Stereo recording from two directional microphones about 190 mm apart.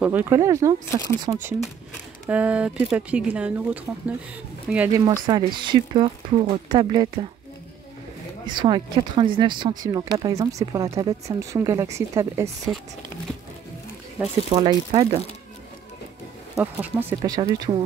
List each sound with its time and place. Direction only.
0.0 s speech: 10° right (ahead or behind)
0.8 s speech: 15° left (ahead or behind)
2.2 s speech: 5° right (ahead or behind)
5.0 s speech: 20° right (ahead or behind)
8.5 s speech: 25° right (ahead or behind)
14.2 s speech: 5° right (ahead or behind)
14.5 s speech: 25° right (ahead or behind)
16.5 s speech: 10° right (ahead or behind)
17.2 s speech: 20° right (ahead or behind)